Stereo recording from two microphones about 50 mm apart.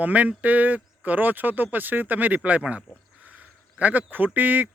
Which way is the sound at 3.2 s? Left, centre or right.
Right.